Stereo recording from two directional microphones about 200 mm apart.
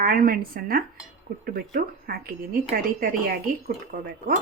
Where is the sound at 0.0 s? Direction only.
45° right (ahead or behind).